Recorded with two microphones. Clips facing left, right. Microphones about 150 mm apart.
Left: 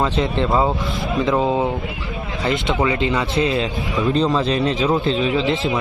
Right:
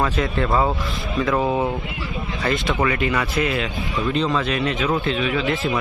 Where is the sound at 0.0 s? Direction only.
25° left (ahead or behind).